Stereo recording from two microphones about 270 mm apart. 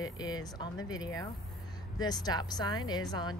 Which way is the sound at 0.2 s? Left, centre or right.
Centre.